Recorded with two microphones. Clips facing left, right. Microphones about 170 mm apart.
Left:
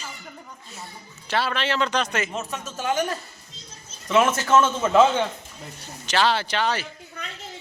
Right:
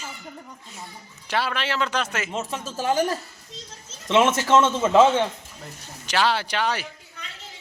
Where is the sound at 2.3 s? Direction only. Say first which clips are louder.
Right 2 dB; 25° right (ahead or behind).